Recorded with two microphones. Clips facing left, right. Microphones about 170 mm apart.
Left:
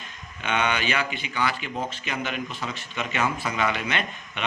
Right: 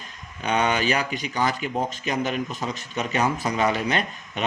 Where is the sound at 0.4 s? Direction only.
40° right (ahead or behind).